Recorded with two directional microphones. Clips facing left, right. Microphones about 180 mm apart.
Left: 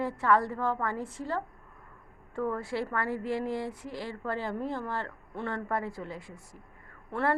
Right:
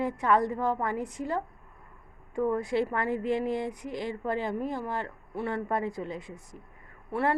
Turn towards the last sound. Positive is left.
turn(degrees=-10)  # may be behind; listen again after turning